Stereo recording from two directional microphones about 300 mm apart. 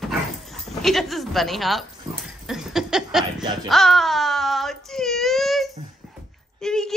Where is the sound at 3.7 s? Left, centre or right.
Centre.